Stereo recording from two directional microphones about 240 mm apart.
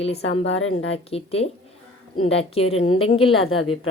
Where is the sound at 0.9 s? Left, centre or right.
Left.